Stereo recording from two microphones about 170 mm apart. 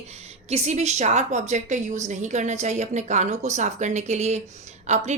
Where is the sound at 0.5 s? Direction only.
40° right (ahead or behind).